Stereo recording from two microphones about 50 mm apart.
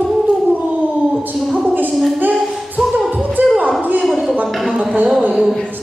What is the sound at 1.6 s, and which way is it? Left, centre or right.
Speech, right.